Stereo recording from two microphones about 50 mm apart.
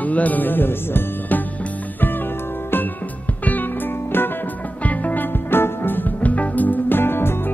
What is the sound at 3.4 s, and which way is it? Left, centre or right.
Music, left.